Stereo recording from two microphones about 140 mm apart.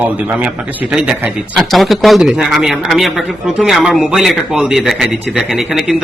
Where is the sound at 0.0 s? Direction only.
10° right (ahead or behind).